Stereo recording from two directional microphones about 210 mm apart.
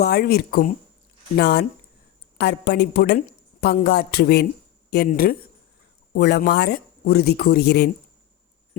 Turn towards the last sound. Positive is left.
turn(degrees=50)  # may be behind; listen again after turning